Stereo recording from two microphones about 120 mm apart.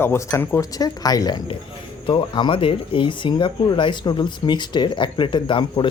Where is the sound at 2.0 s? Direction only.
40° left (ahead or behind).